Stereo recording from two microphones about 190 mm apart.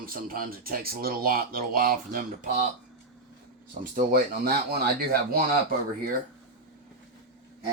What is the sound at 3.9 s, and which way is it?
Speech, 50° right (ahead or behind).